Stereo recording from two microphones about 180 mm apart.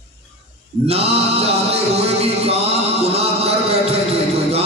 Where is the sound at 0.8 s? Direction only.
35° right (ahead or behind).